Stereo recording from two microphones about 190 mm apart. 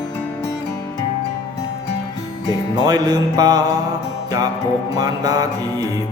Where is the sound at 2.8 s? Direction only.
20° right (ahead or behind).